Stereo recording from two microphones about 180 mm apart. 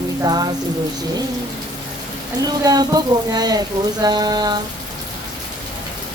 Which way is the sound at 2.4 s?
20° right (ahead or behind).